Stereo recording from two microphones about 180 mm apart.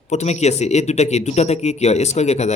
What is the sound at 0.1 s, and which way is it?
Speech, 40° left (ahead or behind).